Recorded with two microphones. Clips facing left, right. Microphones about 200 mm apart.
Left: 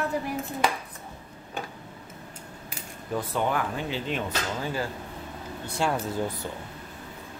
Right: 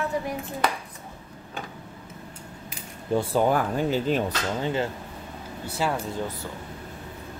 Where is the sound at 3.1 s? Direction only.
35° right (ahead or behind).